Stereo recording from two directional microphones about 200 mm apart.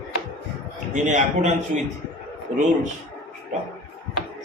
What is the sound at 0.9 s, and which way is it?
Speech, 35° right (ahead or behind).